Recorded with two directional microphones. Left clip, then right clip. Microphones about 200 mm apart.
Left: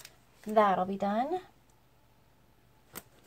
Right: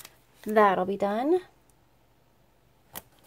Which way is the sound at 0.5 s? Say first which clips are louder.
Right 4 dB; 55° right (ahead or behind).